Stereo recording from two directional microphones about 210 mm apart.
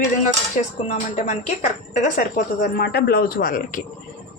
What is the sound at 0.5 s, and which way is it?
A woman's voice, 35° left (ahead or behind).